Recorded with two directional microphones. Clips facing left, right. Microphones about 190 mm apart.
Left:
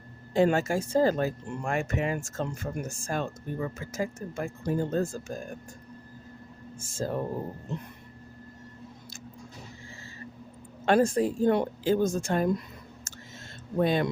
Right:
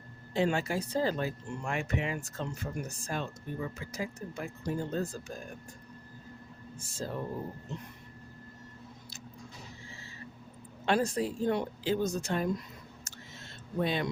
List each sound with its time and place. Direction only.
0.3 s speech: 45° left (ahead or behind)
6.7 s speech: 45° left (ahead or behind)
7.7 s a sound: 55° left (ahead or behind)
10.8 s speech: 50° left (ahead or behind)
13.1 s a sound: 45° left (ahead or behind)
13.7 s speech: 50° left (ahead or behind)